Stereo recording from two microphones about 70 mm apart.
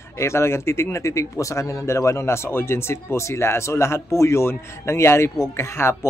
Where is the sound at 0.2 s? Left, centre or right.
Left.